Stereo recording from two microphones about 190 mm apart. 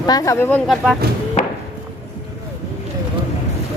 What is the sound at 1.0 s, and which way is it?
Chop, 55° right (ahead or behind).